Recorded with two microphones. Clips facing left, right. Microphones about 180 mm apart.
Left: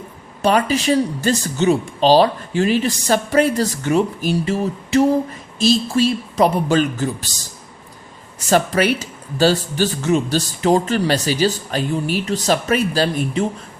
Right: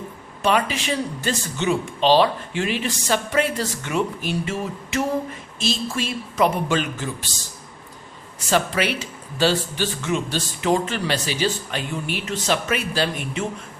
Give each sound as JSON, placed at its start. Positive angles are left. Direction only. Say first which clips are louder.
{"t": 0.4, "sound": "speech", "louder": "left 5 dB", "side_deg": 40}
{"t": 8.4, "sound": "speech", "louder": "left 5 dB", "side_deg": 45}